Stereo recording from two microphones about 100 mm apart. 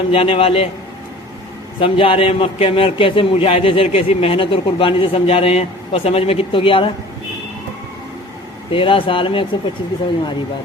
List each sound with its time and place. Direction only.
0.1 s a man's voice: 70° left (ahead or behind)
1.8 s a man's voice: 65° left (ahead or behind)
8.7 s a man's voice: 60° left (ahead or behind)